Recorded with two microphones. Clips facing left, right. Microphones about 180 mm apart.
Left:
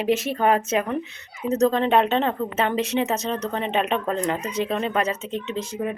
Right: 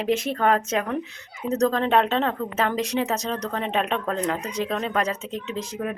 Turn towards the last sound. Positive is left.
turn(degrees=0)  # may be behind; listen again after turning